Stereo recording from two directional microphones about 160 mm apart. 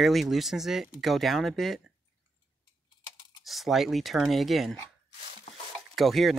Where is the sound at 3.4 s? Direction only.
Centre (ahead or behind).